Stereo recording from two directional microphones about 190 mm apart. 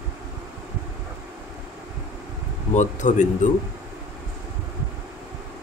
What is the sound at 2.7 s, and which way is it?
Speech, 40° left (ahead or behind).